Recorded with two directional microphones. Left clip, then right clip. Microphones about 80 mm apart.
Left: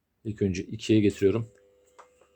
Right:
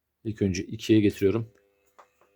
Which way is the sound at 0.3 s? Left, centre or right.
Right.